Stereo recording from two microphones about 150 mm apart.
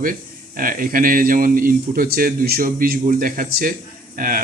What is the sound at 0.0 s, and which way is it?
A man's voice, 70° right (ahead or behind).